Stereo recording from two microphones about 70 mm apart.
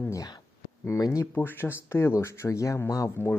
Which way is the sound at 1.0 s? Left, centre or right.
Left.